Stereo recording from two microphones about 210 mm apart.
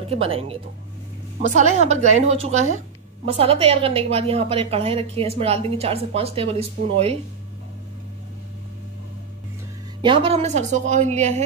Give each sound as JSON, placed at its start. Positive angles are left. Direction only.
{"t": 0.1, "sound": "a woman's voice", "side_deg": -30}
{"t": 1.6, "sound": "a woman's voice", "side_deg": -35}
{"t": 10.0, "sound": "a woman's voice", "side_deg": -25}